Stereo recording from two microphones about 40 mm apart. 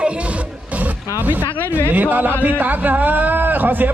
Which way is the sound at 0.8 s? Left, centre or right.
Right.